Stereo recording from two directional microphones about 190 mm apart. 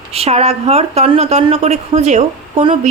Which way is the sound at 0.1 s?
35° right (ahead or behind).